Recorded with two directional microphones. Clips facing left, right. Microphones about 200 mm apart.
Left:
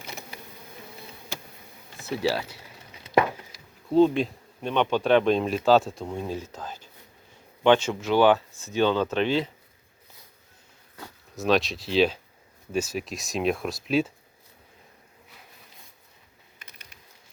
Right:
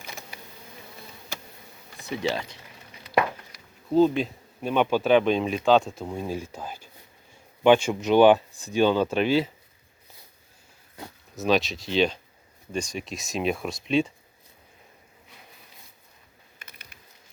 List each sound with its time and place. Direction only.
2.3 s speech: 5° left (ahead or behind)
3.9 s speech: centre (ahead or behind)
11.3 s speech: centre (ahead or behind)